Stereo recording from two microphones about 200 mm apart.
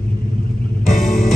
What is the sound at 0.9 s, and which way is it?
Music, 35° left (ahead or behind).